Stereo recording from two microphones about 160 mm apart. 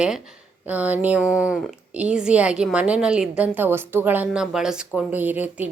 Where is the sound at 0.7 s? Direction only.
10° right (ahead or behind).